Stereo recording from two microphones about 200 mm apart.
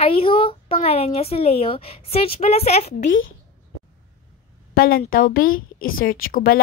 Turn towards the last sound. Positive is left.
turn(degrees=45)  # may be behind; listen again after turning